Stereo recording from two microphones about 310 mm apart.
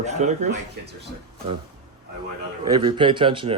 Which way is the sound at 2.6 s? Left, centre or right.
Centre.